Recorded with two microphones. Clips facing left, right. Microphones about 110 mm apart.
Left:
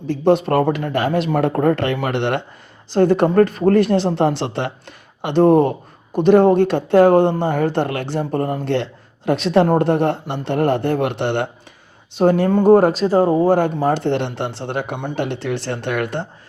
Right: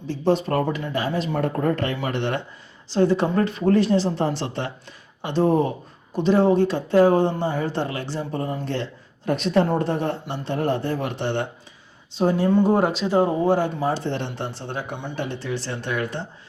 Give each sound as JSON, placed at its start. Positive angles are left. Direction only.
{"t": 0.1, "sound": "speech", "side_deg": 60}
{"t": 2.9, "sound": "speech", "side_deg": 55}
{"t": 13.9, "sound": "speech", "side_deg": 65}